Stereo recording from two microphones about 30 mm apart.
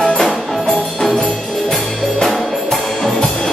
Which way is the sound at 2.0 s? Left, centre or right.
Centre.